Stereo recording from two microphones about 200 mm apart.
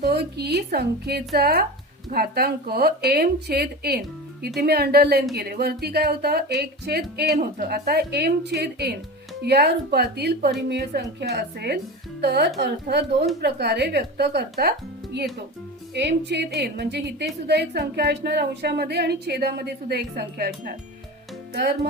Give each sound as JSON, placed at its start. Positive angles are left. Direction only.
{"t": 0.0, "sound": "speech", "side_deg": -55}